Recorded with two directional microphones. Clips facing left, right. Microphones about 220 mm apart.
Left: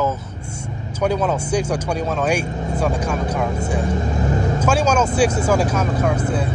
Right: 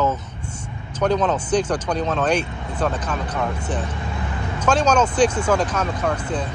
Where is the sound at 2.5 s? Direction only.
40° left (ahead or behind).